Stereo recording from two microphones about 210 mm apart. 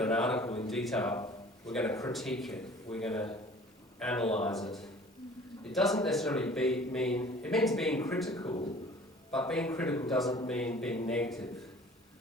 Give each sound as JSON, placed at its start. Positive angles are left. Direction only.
{"t": 0.0, "sound": "a man's voice", "side_deg": 5}
{"t": 5.6, "sound": "a man's voice", "side_deg": 0}
{"t": 8.3, "sound": "speech", "side_deg": 20}
{"t": 9.3, "sound": "a man's voice", "side_deg": 5}